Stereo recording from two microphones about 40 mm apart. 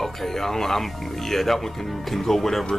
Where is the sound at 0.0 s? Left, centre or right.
Centre.